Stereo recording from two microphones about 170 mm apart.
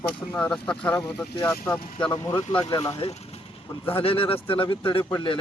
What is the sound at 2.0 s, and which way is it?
Speech, 30° left (ahead or behind).